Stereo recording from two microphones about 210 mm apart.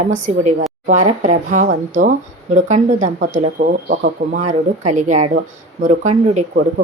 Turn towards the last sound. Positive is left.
turn(degrees=-40)  # may be behind; listen again after turning